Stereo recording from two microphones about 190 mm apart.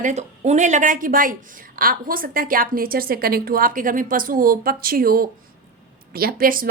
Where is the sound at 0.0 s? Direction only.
35° right (ahead or behind).